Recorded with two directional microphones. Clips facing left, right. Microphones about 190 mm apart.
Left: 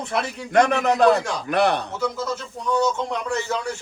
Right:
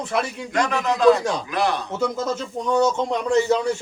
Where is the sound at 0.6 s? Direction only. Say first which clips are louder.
Left 4 dB; 60° left (ahead or behind).